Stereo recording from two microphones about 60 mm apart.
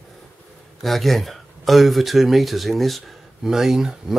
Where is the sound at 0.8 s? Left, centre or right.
Centre.